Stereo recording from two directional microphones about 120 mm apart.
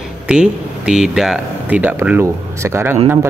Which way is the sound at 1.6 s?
15° right (ahead or behind).